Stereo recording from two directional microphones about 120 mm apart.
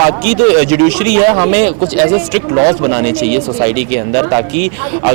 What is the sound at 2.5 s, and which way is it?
Speech, 40° right (ahead or behind).